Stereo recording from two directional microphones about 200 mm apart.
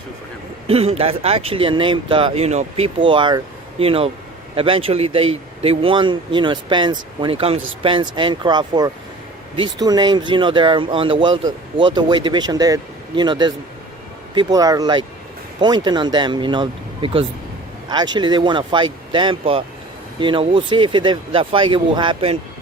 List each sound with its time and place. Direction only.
0.7 s speech: 30° right (ahead or behind)